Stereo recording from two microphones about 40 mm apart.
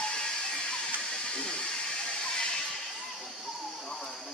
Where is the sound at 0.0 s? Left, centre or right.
Left.